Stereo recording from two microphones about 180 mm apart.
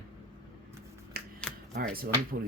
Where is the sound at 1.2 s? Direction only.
55° right (ahead or behind).